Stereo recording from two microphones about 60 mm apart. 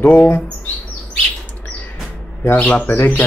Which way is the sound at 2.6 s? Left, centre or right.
Left.